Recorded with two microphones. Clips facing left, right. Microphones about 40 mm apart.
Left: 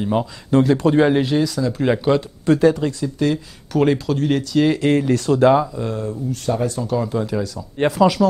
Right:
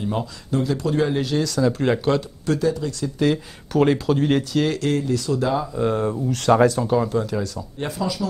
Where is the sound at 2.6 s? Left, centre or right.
Left.